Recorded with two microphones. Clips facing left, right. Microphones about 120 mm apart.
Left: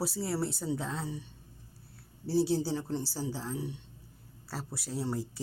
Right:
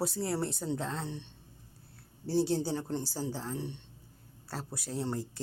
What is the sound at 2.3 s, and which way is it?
Speech, 5° left (ahead or behind).